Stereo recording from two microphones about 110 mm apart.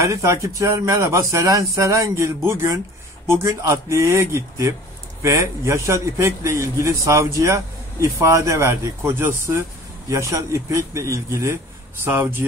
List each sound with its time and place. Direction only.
0.0 s a man's voice: 30° right (ahead or behind)